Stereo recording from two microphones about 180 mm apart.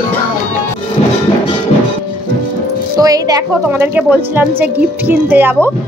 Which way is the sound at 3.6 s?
10° right (ahead or behind).